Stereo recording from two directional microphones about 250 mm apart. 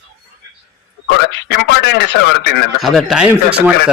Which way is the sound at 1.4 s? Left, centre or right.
Left.